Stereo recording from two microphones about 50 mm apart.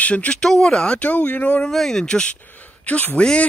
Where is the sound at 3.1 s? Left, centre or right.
Centre.